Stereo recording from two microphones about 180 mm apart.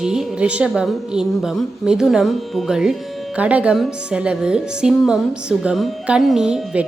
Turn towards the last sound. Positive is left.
turn(degrees=-5)  # may be behind; listen again after turning